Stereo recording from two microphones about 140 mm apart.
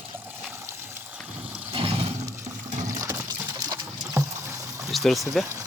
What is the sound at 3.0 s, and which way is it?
Water, 20° right (ahead or behind).